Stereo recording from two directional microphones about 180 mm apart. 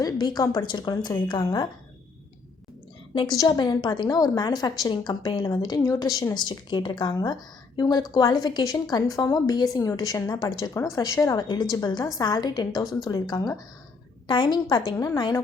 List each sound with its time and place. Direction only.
0.0 s a woman's voice: 20° left (ahead or behind)
3.2 s a woman's voice: 20° left (ahead or behind)